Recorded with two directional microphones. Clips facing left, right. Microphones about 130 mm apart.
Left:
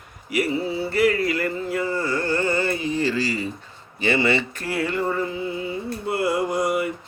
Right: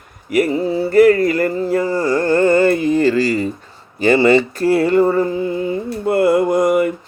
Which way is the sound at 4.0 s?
40° right (ahead or behind).